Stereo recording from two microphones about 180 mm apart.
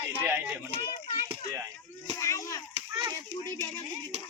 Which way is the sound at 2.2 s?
15° left (ahead or behind).